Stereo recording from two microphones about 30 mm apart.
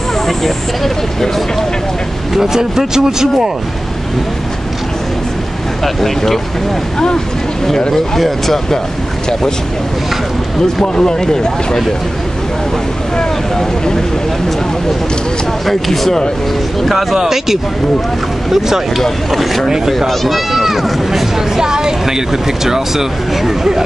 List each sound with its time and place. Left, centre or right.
2.3 s speech: centre
5.9 s speech: centre
11.0 s speech: left
15.6 s speech: centre
16.9 s speech: centre
19.3 s speech: centre
20.2 s run: centre
21.5 s a woman's voice: right